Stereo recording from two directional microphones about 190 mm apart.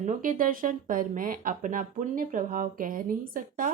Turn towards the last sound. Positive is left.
turn(degrees=-45)  # may be behind; listen again after turning